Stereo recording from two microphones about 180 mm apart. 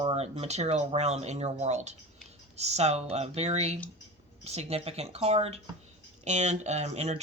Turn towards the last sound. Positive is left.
turn(degrees=-35)  # may be behind; listen again after turning